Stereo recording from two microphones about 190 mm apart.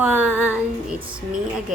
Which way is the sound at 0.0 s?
10° right (ahead or behind).